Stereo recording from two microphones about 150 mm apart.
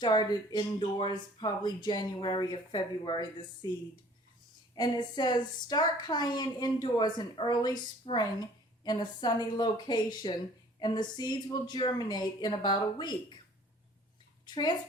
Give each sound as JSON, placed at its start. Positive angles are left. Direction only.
{"t": 0.0, "sound": "speech", "side_deg": 30}
{"t": 4.7, "sound": "a woman's voice", "side_deg": 30}
{"t": 14.4, "sound": "a child's voice", "side_deg": 30}